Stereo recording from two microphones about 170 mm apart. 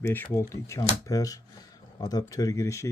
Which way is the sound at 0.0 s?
10° left (ahead or behind).